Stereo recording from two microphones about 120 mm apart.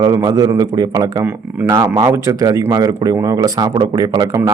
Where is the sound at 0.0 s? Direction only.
35° right (ahead or behind).